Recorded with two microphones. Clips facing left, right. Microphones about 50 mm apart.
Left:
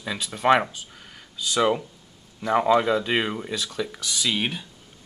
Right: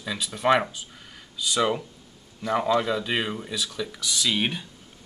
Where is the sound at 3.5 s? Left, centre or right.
Left.